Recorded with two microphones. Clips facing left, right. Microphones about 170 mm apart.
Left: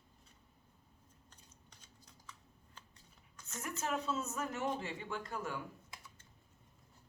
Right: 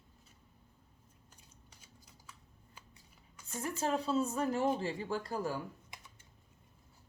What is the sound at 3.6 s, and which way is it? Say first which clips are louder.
Speech: right 5 dB; 30° right (ahead or behind).